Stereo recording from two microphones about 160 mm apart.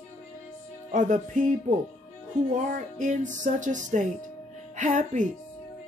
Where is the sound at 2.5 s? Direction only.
50° right (ahead or behind).